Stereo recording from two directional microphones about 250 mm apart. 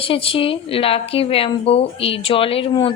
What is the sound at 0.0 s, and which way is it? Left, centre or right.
Speech, left.